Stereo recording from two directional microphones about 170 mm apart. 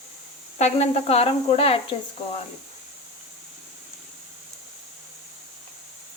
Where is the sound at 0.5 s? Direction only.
40° left (ahead or behind).